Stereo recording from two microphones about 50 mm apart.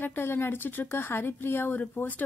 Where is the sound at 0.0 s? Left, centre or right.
Left.